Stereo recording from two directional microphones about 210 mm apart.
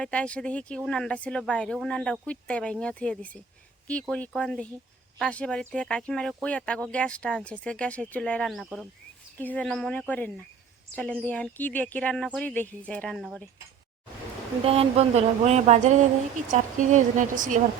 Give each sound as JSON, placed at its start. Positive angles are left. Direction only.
{"t": 0.0, "sound": "speech", "side_deg": 5}
{"t": 14.6, "sound": "speech", "side_deg": -25}